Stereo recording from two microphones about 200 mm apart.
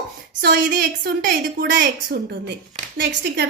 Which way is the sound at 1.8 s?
60° right (ahead or behind).